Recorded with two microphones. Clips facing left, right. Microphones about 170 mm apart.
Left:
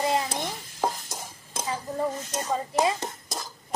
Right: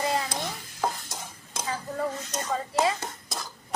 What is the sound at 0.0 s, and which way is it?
Stir, 20° left (ahead or behind).